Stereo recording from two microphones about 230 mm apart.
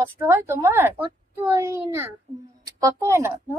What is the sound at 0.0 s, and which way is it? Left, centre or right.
Speech, centre.